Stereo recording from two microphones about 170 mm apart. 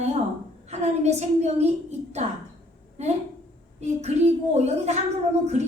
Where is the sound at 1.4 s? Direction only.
40° right (ahead or behind).